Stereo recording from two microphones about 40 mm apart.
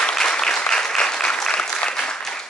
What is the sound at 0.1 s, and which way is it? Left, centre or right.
Applause, centre.